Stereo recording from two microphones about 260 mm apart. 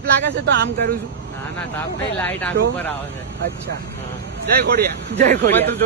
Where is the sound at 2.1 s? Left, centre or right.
Centre.